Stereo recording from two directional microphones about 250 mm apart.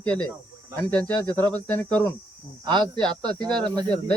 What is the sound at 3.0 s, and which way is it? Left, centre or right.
Speech, centre.